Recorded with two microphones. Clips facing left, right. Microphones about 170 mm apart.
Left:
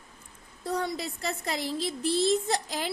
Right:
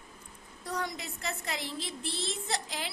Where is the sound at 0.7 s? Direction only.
30° left (ahead or behind).